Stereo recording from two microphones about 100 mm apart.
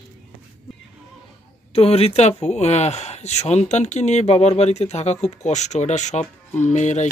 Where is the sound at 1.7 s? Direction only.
85° left.